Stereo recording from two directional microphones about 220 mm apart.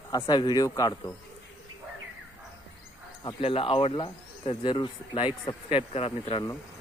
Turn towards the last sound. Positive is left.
turn(degrees=25)  # may be behind; listen again after turning